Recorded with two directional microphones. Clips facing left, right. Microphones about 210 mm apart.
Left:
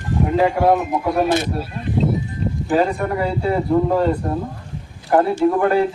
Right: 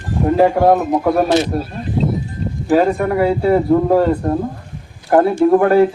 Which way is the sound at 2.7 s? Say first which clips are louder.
Right 5 dB; 45° right (ahead or behind).